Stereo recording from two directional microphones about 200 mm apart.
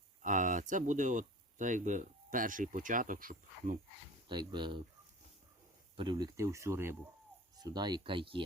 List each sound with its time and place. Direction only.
0.2 s speech: 40° right (ahead or behind)
4.3 s speech: 20° right (ahead or behind)
6.0 s speech: 20° right (ahead or behind)